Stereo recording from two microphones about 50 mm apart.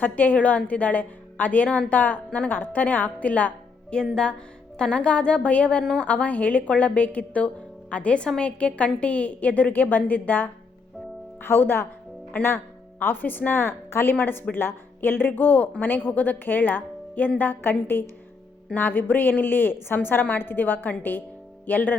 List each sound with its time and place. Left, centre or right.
0.0 s speech: left
4.1 s speech: centre; by 21.9 s left